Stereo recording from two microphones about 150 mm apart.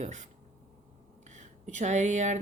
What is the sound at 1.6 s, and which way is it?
Speech, 55° right (ahead or behind).